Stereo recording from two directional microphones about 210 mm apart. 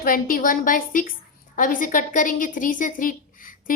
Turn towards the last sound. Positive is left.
turn(degrees=40)  # may be behind; listen again after turning